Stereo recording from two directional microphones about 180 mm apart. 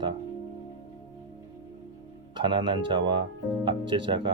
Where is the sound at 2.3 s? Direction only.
25° right (ahead or behind).